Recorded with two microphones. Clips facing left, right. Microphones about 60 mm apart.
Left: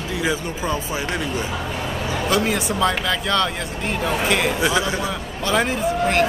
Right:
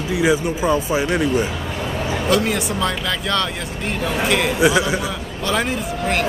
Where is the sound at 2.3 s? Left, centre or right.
Centre.